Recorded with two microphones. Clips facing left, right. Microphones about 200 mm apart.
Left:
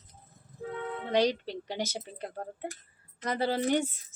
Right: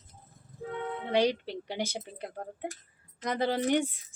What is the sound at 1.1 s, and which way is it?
A woman's voice, 15° right (ahead or behind).